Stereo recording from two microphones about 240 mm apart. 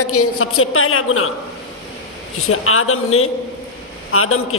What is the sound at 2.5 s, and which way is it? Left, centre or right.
A man's voice, left.